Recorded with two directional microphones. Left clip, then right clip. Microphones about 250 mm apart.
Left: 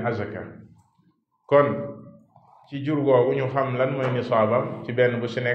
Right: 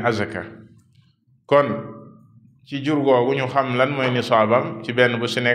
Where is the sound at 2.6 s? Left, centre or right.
Right.